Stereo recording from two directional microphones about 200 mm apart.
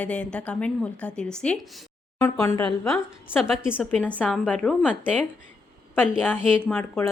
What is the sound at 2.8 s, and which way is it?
A woman's voice, centre (ahead or behind).